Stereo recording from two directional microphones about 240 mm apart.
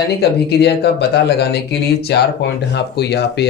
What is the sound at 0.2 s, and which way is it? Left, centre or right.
Speech, left.